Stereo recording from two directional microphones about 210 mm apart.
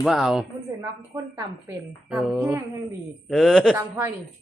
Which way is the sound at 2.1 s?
Centre (ahead or behind).